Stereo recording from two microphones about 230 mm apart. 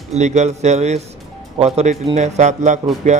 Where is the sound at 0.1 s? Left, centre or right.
Right.